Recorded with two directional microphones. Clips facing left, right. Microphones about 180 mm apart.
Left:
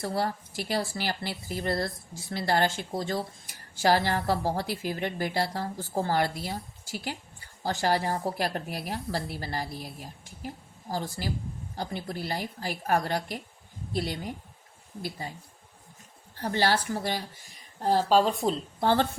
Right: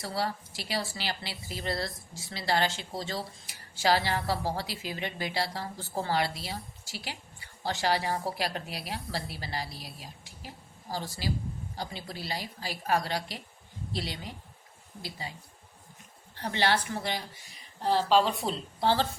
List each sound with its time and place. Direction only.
0.0 s a woman's voice: 50° left (ahead or behind)